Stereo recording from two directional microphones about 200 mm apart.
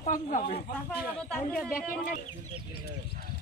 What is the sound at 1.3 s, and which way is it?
Speech, 5° left (ahead or behind).